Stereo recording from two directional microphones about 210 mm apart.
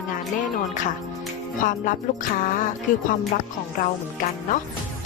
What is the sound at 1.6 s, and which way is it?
Speech, 40° left (ahead or behind).